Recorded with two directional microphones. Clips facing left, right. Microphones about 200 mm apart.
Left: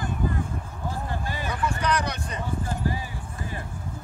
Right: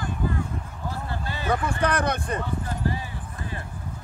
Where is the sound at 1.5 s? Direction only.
55° right (ahead or behind).